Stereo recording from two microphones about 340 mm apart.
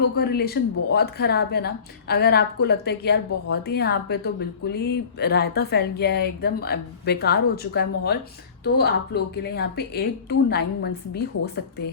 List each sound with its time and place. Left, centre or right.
0.2 s speech: left